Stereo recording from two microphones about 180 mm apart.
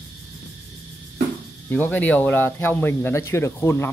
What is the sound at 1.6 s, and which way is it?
Speech, 10° left (ahead or behind).